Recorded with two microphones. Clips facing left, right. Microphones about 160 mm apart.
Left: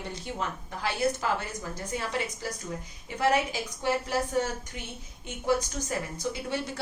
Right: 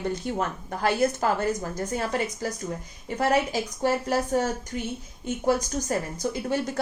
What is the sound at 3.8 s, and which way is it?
A woman's voice, 45° right (ahead or behind).